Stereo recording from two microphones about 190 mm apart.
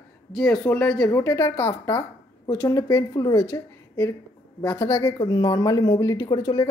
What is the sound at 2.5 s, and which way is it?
A woman's voice, 15° left (ahead or behind).